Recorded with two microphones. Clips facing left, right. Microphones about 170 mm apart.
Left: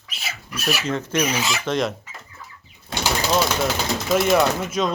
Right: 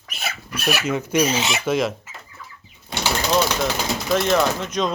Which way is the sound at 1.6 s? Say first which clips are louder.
Right 2 dB; 5° right (ahead or behind).